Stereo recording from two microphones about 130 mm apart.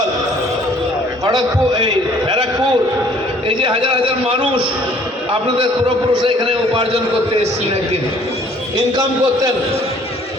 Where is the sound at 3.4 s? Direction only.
40° right (ahead or behind).